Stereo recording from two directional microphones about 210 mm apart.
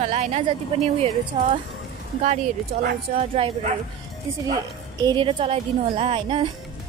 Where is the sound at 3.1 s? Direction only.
25° right (ahead or behind).